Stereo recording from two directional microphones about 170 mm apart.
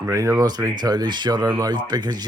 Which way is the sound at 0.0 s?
20° right (ahead or behind).